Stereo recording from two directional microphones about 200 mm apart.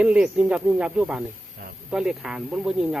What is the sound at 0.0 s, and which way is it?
Speech, 5° right (ahead or behind).